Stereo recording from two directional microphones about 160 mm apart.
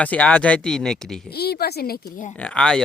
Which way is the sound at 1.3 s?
85° left.